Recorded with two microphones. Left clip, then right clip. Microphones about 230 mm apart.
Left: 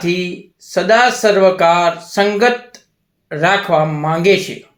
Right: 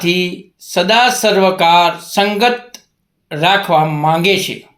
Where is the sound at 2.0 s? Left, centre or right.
Right.